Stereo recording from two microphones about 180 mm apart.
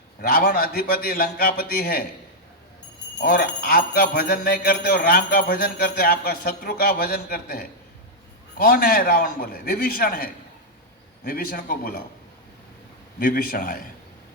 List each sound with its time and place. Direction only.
0.2 s jingle bell: 55° left (ahead or behind)
3.2 s jingle bell: 55° left (ahead or behind)
8.5 s a man's voice: 55° left (ahead or behind)
13.1 s a man's voice: 55° left (ahead or behind)